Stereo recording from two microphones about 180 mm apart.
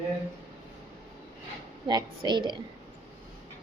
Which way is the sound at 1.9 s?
25° right (ahead or behind).